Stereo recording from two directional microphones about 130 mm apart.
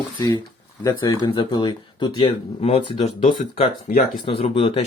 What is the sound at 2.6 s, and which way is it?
Speech, 50° left (ahead or behind).